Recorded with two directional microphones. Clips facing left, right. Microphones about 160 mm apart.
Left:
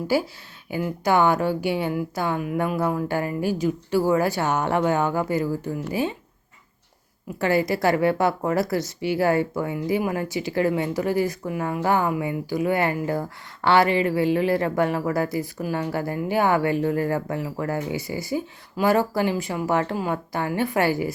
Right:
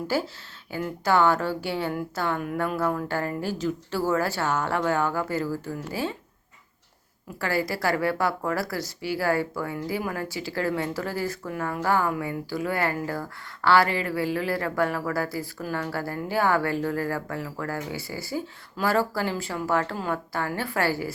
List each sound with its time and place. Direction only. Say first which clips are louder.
0.1 s a woman's voice: left 5 dB; 10° left (ahead or behind)
7.3 s speech: left 6 dB; 20° left (ahead or behind)